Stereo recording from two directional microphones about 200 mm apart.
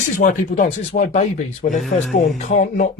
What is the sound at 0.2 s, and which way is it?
Speech, 40° left (ahead or behind).